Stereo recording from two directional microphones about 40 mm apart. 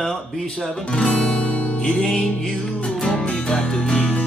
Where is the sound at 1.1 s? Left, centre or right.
Left.